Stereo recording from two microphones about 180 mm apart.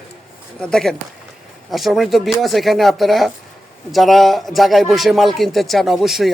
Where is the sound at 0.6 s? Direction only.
5° left (ahead or behind).